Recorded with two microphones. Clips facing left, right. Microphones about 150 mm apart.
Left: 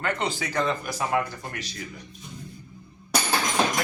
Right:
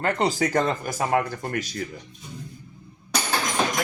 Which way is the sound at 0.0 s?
40° right (ahead or behind).